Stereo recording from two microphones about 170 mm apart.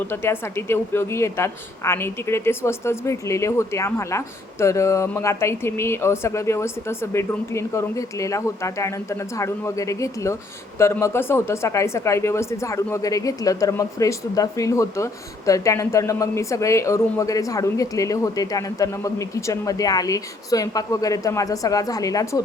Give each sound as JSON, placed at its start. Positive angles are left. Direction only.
{"t": 0.0, "sound": "a woman's voice", "side_deg": 15}